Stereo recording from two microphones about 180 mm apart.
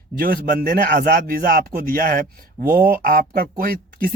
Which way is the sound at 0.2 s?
55° right (ahead or behind).